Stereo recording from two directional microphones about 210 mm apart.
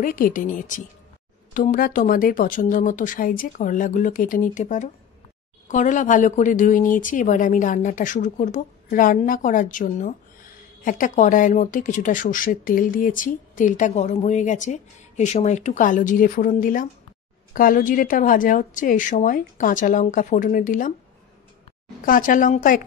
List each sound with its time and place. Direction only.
0.0 s speech: 40° left (ahead or behind)
22.0 s speech: 40° left (ahead or behind)